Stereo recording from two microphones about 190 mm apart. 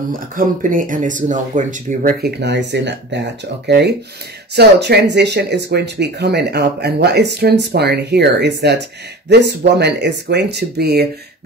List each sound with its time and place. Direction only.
0.1 s speech: 45° right (ahead or behind)
2.2 s speech: 60° right (ahead or behind)